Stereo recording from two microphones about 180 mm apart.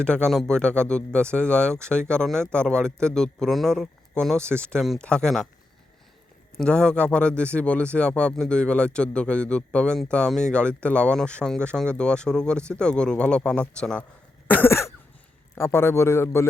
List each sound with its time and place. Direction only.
0.0 s speech: 5° left (ahead or behind)
6.6 s speech: 5° left (ahead or behind)
14.4 s cough: 10° left (ahead or behind)
15.5 s a man's voice: 15° left (ahead or behind)